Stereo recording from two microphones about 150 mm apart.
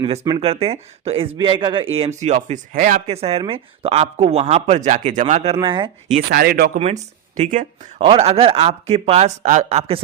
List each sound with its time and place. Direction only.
0.0 s a man's voice: 35° right (ahead or behind); by 3.0 s 65° right (ahead or behind)
3.1 s speech: 40° right (ahead or behind)
5.5 s a man's voice: 35° right (ahead or behind)
6.3 s speech: 90° right
7.3 s speech: 55° right (ahead or behind)
7.9 s speech: 40° right (ahead or behind)